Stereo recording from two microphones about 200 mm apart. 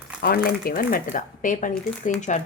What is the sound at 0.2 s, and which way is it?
A woman's voice, 50° left (ahead or behind).